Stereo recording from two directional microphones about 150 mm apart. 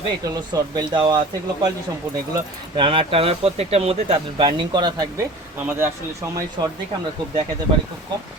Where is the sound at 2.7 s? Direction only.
35° right (ahead or behind).